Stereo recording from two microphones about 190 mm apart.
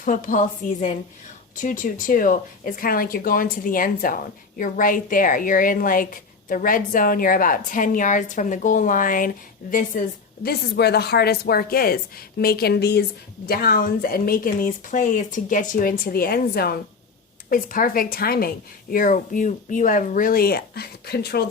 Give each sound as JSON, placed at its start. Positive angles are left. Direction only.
{"t": 0.0, "sound": "speech", "side_deg": 45}
{"t": 10.4, "sound": "a woman's voice", "side_deg": 60}